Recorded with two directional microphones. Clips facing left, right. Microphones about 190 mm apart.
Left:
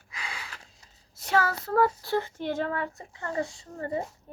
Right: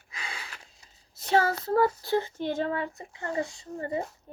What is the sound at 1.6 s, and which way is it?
Child singing, 30° right (ahead or behind).